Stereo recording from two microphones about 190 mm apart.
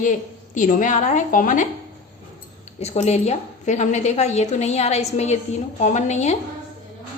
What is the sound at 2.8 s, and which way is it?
A woman's voice, 35° left (ahead or behind).